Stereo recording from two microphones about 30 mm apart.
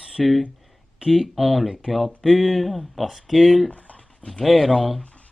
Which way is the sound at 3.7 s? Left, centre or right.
Left.